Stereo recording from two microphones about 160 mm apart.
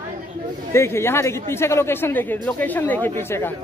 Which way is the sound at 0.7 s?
15° left (ahead or behind).